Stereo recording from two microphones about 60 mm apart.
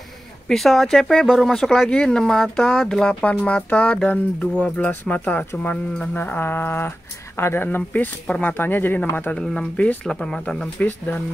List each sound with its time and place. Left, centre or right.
0.5 s speech: centre
3.1 s speech: centre
6.1 s music: left
9.4 s speech: centre
10.8 s music: left